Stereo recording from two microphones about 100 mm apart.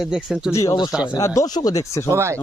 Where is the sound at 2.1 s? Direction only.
30° right (ahead or behind).